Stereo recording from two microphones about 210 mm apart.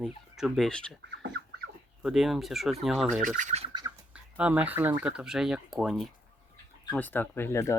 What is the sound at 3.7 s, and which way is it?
Bird, 20° right (ahead or behind).